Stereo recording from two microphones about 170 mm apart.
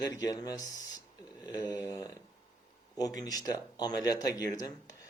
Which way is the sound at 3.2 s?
20° left (ahead or behind).